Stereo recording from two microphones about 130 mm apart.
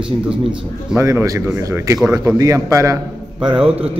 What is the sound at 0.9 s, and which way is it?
A man's voice, 20° right (ahead or behind).